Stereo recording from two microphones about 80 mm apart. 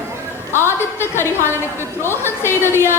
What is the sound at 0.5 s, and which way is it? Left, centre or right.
A woman's voice, left.